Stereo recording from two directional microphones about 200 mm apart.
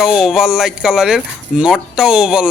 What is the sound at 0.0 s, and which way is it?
Speech, centre (ahead or behind).